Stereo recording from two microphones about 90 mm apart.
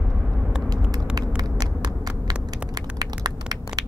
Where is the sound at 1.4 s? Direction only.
45° right (ahead or behind).